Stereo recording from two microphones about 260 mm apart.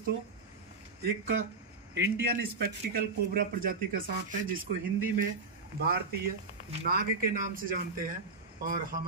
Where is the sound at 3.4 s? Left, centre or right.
Right.